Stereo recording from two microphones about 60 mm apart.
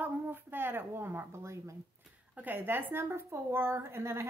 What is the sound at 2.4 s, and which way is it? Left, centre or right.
A woman's voice, right.